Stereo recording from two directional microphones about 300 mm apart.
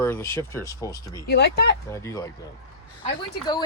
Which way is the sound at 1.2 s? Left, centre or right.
Left.